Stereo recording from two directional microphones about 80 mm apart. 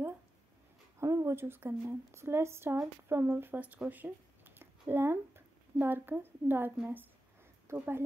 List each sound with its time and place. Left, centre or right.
0.9 s a woman's voice: right; by 3.8 s centre
3.9 s a sound: right
7.7 s speech: right